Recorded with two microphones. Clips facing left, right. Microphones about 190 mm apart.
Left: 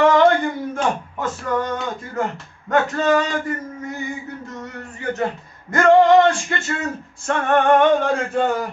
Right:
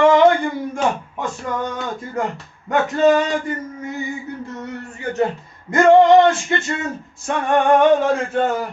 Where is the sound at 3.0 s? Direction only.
20° right (ahead or behind).